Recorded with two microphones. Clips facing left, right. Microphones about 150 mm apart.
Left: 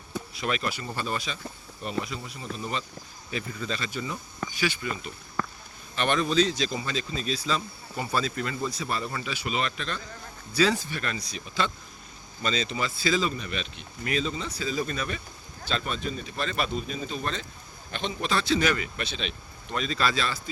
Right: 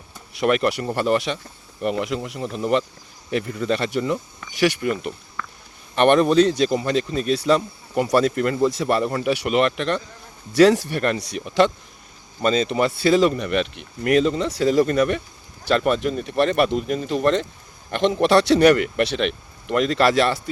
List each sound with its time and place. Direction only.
0.3 s speech: 65° right (ahead or behind)
3.3 s speech: 60° right (ahead or behind)
5.4 s a sound: 35° left (ahead or behind)
6.0 s speech: 60° right (ahead or behind)
12.4 s speech: 50° right (ahead or behind); by 20.4 s 70° right (ahead or behind)